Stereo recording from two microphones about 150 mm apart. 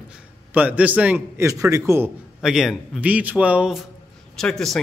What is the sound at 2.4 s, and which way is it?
A man's voice, centre (ahead or behind).